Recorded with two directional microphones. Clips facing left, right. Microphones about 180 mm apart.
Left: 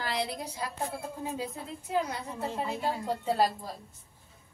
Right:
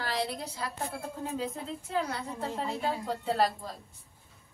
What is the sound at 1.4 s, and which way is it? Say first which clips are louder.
A woman's voice: right 2 dB; 10° left (ahead or behind).